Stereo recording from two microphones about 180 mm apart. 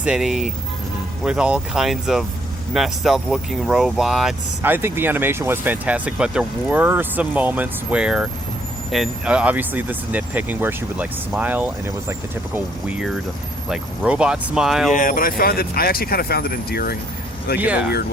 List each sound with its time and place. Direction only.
0.0 s speech: 5° right (ahead or behind)
14.9 s speech: 50° left (ahead or behind)
17.6 s speech: 5° right (ahead or behind)